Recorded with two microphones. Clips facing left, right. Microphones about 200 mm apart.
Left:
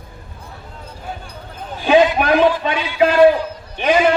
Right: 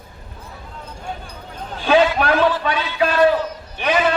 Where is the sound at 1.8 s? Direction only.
15° left (ahead or behind).